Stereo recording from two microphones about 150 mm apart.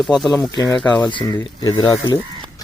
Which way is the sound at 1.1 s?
30° left (ahead or behind).